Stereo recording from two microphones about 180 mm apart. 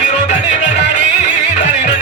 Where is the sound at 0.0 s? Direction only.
40° left (ahead or behind).